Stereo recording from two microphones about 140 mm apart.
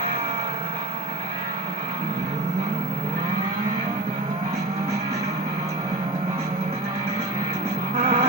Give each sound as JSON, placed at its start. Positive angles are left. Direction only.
{"t": 7.9, "sound": "vehicle", "side_deg": -45}